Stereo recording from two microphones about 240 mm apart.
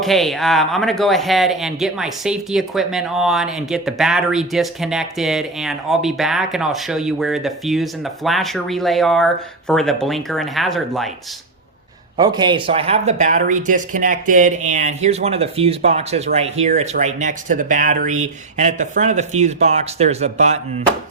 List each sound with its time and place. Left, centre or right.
0.0 s speech: centre
12.1 s speech: centre